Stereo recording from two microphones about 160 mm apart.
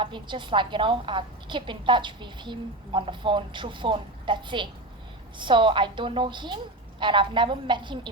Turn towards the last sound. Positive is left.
turn(degrees=-30)  # may be behind; listen again after turning